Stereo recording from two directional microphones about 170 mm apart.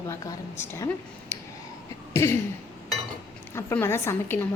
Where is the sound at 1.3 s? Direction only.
15° left (ahead or behind).